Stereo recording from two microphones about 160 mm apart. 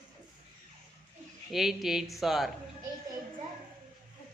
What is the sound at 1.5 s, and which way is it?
Mantra, centre (ahead or behind).